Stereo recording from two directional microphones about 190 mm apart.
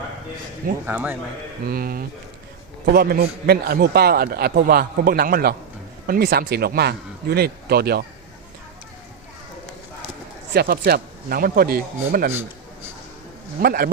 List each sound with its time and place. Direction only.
0.9 s speech: 10° right (ahead or behind)
1.6 s a man's voice: 50° right (ahead or behind)
10.5 s a man's voice: 55° right (ahead or behind)
13.6 s a man's voice: 50° right (ahead or behind)